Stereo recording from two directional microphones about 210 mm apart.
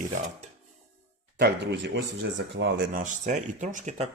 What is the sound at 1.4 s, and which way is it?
Speech, 50° right (ahead or behind).